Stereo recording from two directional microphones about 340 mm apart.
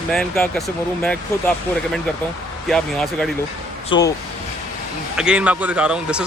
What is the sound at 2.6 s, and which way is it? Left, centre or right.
Speech, centre.